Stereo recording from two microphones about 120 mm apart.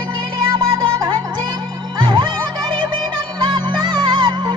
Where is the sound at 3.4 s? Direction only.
45° right (ahead or behind).